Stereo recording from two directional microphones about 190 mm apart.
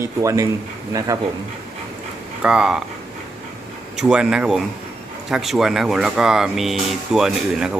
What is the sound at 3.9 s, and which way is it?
Speech, 5° right (ahead or behind).